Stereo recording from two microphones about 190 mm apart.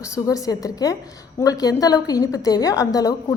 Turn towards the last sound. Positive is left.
turn(degrees=20)  # may be behind; listen again after turning